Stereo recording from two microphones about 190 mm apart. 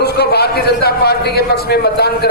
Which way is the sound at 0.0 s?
60° left (ahead or behind).